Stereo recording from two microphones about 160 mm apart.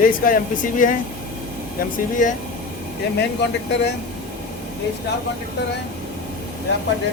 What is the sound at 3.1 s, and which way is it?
Speech, 90° left.